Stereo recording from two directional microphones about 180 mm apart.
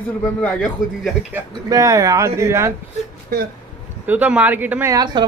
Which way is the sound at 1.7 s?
20° right (ahead or behind).